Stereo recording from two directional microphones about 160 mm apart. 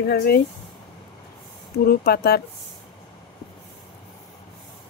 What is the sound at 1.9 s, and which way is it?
Speech, 75° left (ahead or behind).